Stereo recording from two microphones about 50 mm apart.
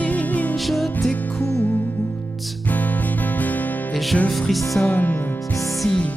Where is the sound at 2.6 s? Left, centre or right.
Left.